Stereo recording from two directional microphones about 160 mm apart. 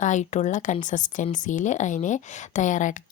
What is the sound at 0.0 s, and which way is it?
Speech, 50° left (ahead or behind).